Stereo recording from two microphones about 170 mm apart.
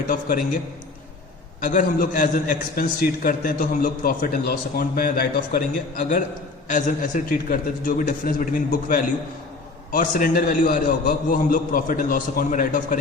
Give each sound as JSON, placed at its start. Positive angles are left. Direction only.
{"t": 0.1, "sound": "a man's voice", "side_deg": 55}
{"t": 1.6, "sound": "a man's voice", "side_deg": 50}
{"t": 6.7, "sound": "a man's voice", "side_deg": 50}